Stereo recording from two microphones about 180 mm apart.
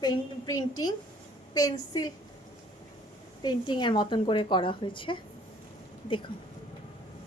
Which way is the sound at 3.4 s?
25° left (ahead or behind).